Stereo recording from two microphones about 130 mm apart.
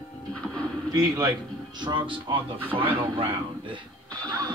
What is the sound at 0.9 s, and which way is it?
Speech, 30° right (ahead or behind).